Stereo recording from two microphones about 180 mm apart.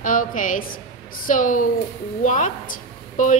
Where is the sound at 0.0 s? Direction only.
50° left (ahead or behind).